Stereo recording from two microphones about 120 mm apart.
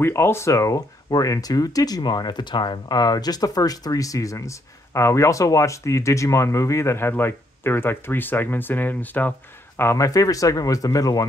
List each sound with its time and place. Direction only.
0.0 s speech: 20° left (ahead or behind)